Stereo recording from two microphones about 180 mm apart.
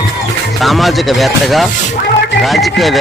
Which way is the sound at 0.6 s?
Centre (ahead or behind).